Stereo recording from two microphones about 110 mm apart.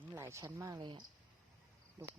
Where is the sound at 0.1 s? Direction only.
25° right (ahead or behind).